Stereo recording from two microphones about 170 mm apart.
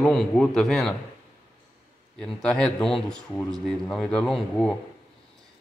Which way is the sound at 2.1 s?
5° left (ahead or behind).